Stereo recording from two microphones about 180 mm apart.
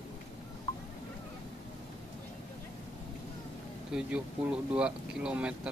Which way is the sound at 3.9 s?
5° right (ahead or behind).